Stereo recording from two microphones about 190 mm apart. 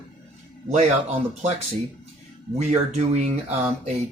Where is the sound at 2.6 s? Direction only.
35° right (ahead or behind).